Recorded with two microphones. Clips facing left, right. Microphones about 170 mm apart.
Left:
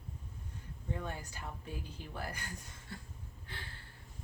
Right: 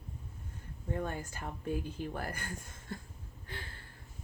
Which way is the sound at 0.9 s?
50° right (ahead or behind).